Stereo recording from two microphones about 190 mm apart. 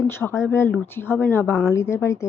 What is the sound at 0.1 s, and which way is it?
Speech, 15° left (ahead or behind).